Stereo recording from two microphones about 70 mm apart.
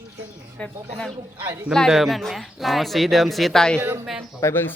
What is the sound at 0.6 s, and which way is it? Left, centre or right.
Speech, centre.